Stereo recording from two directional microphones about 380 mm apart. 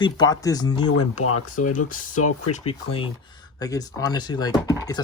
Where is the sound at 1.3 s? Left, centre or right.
Left.